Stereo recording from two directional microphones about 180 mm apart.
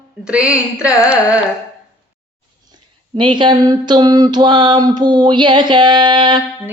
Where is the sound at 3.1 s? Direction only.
25° right (ahead or behind).